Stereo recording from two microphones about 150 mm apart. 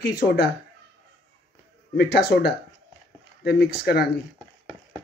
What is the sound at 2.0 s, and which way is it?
Speech, 90° left.